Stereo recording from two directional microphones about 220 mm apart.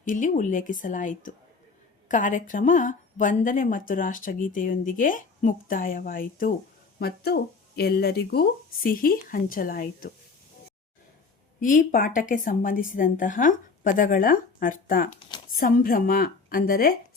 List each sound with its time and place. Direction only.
0.0 s a woman's voice: 35° left (ahead or behind)
11.6 s a woman's voice: 35° left (ahead or behind)